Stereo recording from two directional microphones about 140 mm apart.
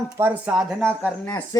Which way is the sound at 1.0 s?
10° left (ahead or behind).